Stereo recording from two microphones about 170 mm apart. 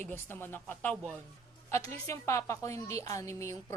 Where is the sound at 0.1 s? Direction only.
10° left (ahead or behind).